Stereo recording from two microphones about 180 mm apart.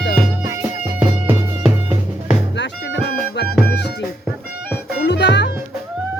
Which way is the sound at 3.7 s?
70° left (ahead or behind).